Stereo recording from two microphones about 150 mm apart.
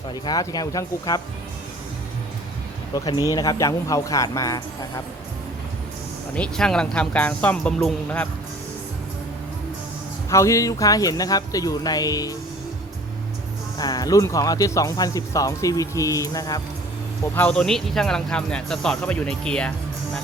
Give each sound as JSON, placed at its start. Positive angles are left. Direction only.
{"t": 0.1, "sound": "speech", "side_deg": 25}
{"t": 2.9, "sound": "speech", "side_deg": 25}
{"t": 6.3, "sound": "speech", "side_deg": 5}
{"t": 10.2, "sound": "speech", "side_deg": 20}
{"t": 13.7, "sound": "speech", "side_deg": 25}
{"t": 17.3, "sound": "speech", "side_deg": 10}